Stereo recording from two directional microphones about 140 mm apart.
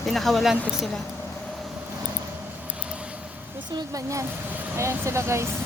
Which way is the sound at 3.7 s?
25° right (ahead or behind).